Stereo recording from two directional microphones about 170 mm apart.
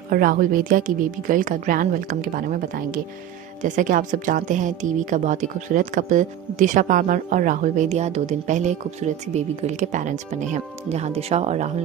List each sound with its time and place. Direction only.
0.1 s a woman's voice: 55° right (ahead or behind)